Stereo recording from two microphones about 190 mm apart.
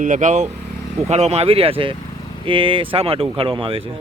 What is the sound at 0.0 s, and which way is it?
Speech, 45° right (ahead or behind).